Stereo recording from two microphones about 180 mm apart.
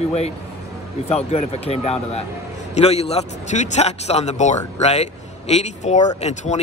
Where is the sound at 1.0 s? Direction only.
35° left (ahead or behind).